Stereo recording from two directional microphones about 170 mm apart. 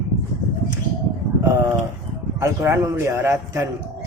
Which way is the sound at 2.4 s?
15° right (ahead or behind).